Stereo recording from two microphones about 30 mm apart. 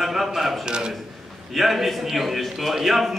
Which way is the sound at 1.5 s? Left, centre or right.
Centre.